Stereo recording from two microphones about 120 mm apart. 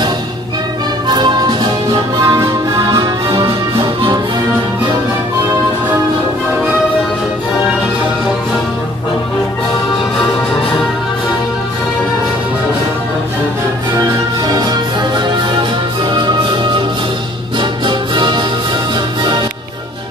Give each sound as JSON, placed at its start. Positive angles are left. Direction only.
{"t": 1.0, "sound": "music", "side_deg": -35}
{"t": 14.5, "sound": "music", "side_deg": -35}